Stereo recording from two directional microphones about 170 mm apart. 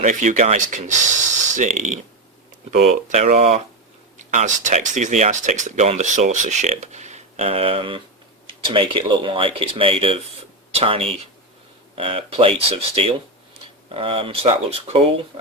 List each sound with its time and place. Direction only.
0.0 s speech: 45° right (ahead or behind)